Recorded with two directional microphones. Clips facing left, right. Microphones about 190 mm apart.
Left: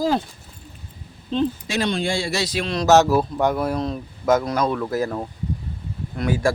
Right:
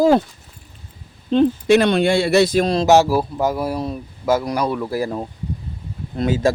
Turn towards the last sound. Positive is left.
turn(degrees=-20)  # may be behind; listen again after turning